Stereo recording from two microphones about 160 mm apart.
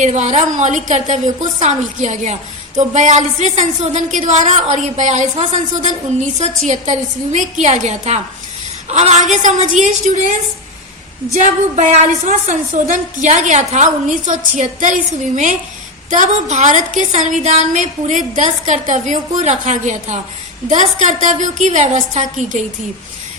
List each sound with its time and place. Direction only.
0.0 s a woman's voice: 45° right (ahead or behind)
11.3 s a woman's voice: 50° right (ahead or behind)